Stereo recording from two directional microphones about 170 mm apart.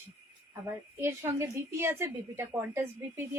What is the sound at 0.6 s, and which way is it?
A woman's voice, 15° right (ahead or behind).